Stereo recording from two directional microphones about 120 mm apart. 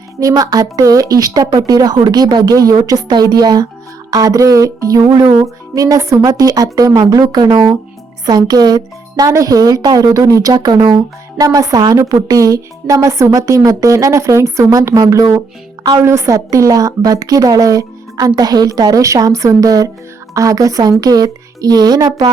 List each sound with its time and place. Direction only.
0.2 s speech: 30° right (ahead or behind)